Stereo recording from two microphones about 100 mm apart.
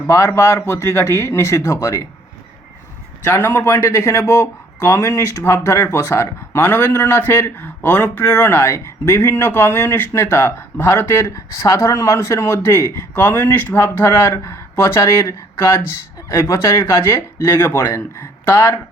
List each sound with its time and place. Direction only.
0.1 s speech: 30° left (ahead or behind)
3.2 s speech: 25° left (ahead or behind)